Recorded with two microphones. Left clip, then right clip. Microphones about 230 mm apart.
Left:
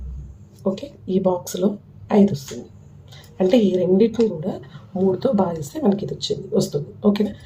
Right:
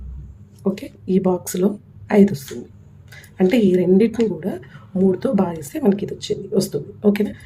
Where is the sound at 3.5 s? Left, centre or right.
Right.